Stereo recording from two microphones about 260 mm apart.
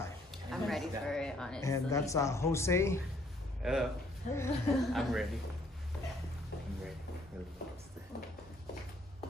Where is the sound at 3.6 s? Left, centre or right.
Centre.